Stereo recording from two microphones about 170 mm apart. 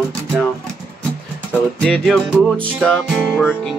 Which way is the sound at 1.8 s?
5° left (ahead or behind).